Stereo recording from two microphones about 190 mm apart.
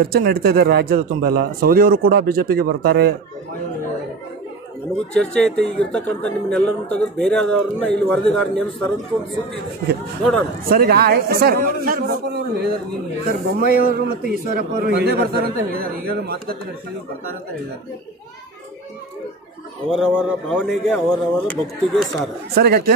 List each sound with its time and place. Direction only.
0.0 s a man's voice: 55° right (ahead or behind)
5.1 s speech: 5° left (ahead or behind)
10.7 s a man's voice: 50° right (ahead or behind)
19.9 s speech: 5° right (ahead or behind)
22.6 s a man's voice: 55° right (ahead or behind)